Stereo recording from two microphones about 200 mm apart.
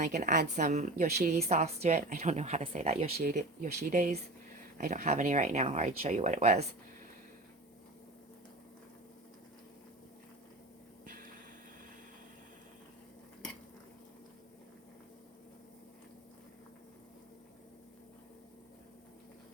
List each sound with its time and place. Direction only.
0.0 s speech: 35° right (ahead or behind)
3.2 s speech: 40° right (ahead or behind)
3.7 s speech: 55° right (ahead or behind)
3.9 s speech: 35° right (ahead or behind)
11.0 s a sound: 45° right (ahead or behind)